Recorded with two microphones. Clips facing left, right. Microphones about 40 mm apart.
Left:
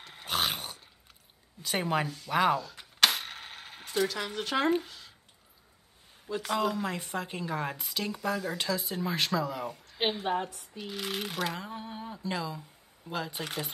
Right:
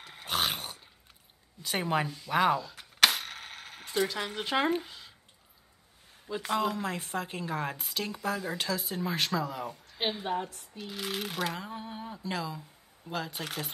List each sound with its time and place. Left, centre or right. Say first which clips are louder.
0.0 s a sound: even; centre
1.6 s a woman's voice: even; centre
2.1 s cap gun: even; centre
4.0 s speech: left 1 dB; centre
4.8 s a sound: right 1 dB; centre
6.2 s a woman's voice: even; centre
10.2 s a woman's voice: left 2 dB; centre
10.8 s a woman's voice: left 1 dB; centre